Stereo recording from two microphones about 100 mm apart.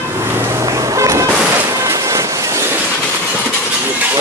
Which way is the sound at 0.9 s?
30° right (ahead or behind).